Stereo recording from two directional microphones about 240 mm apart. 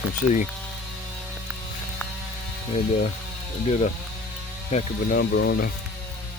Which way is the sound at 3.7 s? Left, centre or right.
Left.